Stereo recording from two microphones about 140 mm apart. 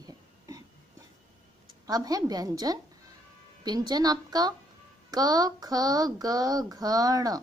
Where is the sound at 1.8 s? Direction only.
25° right (ahead or behind).